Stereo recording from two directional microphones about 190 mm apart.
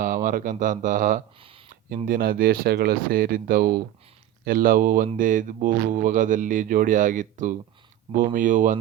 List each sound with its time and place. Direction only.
0.0 s speech: 45° right (ahead or behind)